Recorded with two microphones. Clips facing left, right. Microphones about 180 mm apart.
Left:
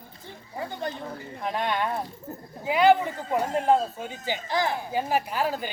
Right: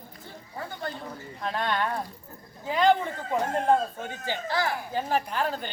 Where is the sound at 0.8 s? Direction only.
15° left (ahead or behind).